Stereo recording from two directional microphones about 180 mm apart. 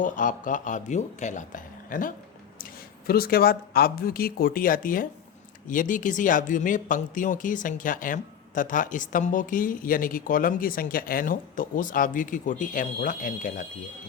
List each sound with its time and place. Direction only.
0.0 s speech: 45° left (ahead or behind)